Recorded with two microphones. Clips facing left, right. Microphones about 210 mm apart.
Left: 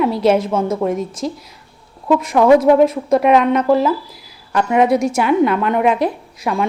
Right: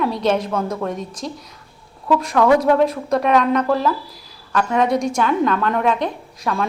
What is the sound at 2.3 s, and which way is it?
A woman's voice, 20° left (ahead or behind).